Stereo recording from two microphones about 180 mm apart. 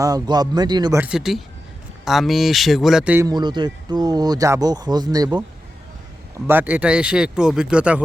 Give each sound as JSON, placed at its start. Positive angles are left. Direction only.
{"t": 0.0, "sound": "speech", "side_deg": -20}
{"t": 0.9, "sound": "speech", "side_deg": -5}
{"t": 3.2, "sound": "speech", "side_deg": -25}
{"t": 6.5, "sound": "speech", "side_deg": -10}